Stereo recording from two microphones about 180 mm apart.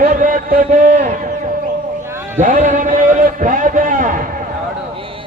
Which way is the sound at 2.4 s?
45° right (ahead or behind).